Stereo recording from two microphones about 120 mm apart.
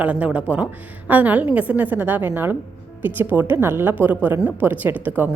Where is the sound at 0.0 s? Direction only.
10° right (ahead or behind).